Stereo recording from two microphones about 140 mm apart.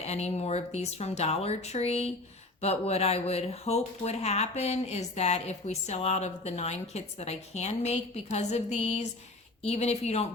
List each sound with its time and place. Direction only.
0.0 s speech: 50° left (ahead or behind)